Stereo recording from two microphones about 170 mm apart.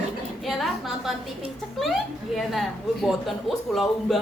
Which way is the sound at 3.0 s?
Centre (ahead or behind).